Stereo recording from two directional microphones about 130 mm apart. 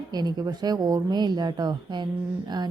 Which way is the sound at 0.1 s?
30° right (ahead or behind).